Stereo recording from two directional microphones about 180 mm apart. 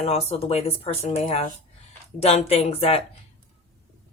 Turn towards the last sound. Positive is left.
turn(degrees=35)  # may be behind; listen again after turning